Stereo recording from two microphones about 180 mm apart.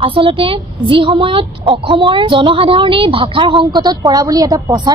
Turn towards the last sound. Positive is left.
turn(degrees=-20)  # may be behind; listen again after turning